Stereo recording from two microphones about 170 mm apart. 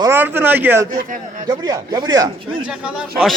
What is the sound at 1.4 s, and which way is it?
Speech, 20° right (ahead or behind).